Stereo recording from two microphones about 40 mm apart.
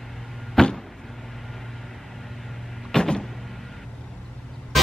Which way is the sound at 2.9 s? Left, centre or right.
Centre.